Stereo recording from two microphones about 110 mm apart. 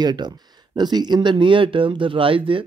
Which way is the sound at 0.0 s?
40° right (ahead or behind).